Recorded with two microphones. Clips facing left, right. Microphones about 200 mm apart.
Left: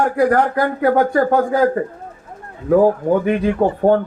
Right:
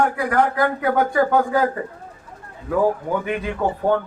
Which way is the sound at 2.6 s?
40° left (ahead or behind).